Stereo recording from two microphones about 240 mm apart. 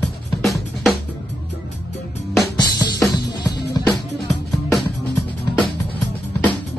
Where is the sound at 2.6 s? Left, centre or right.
Centre.